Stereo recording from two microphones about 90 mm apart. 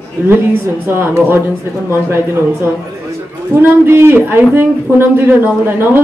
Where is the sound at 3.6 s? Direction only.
25° right (ahead or behind).